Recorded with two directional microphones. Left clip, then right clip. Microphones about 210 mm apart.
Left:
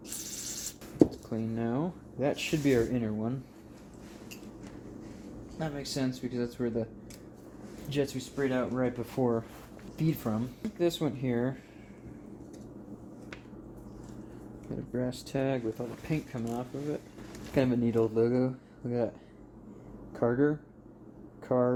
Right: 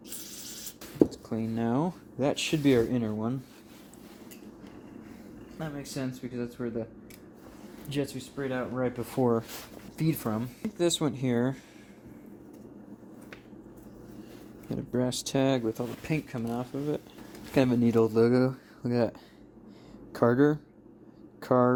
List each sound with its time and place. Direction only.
0.1 s owl: centre (ahead or behind)
1.1 s speech: 35° right (ahead or behind)
5.5 s speech: 15° right (ahead or behind)
8.0 s speech: 25° right (ahead or behind); by 11.6 s 40° right (ahead or behind)
14.7 s speech: 40° right (ahead or behind)
20.1 s speech: 50° right (ahead or behind)